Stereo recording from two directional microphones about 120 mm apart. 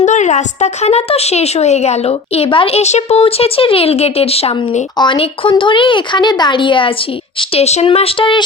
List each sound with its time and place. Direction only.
0.0 s a woman's voice: 80° left; by 4.8 s 55° left (ahead or behind)
4.9 s speech: 45° left (ahead or behind)
7.5 s speech: 65° left (ahead or behind); by 8.4 s 45° left (ahead or behind)